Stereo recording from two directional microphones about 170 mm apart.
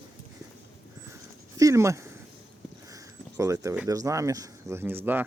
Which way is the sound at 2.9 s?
15° right (ahead or behind).